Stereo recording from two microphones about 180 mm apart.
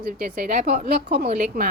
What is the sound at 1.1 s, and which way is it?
Speech, 55° right (ahead or behind).